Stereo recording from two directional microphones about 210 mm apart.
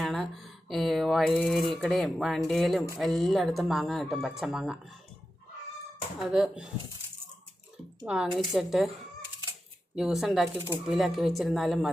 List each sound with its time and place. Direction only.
0.0 s speech: centre (ahead or behind)
6.3 s speech: 5° right (ahead or behind)
8.0 s speech: 5° right (ahead or behind)
9.9 s speech: centre (ahead or behind)